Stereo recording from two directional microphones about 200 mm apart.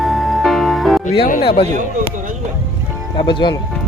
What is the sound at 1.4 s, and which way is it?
Speech, 25° left (ahead or behind).